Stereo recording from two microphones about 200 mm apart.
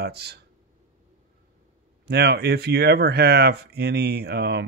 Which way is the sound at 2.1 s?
55° right (ahead or behind).